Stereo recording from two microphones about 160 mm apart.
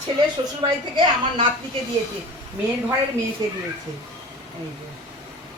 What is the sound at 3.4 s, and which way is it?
Speech, 25° right (ahead or behind).